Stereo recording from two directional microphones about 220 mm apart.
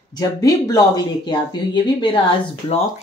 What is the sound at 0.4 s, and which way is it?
Speech, 15° left (ahead or behind).